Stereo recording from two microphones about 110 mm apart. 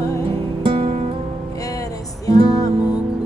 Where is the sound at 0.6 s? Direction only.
60° right (ahead or behind).